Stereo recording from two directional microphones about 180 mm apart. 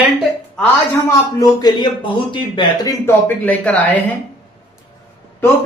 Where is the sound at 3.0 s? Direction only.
10° left (ahead or behind).